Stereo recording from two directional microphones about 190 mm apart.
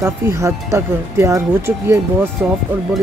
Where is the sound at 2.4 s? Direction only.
5° right (ahead or behind).